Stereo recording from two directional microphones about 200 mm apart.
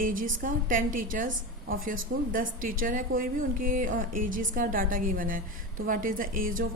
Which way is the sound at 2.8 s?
45° right (ahead or behind).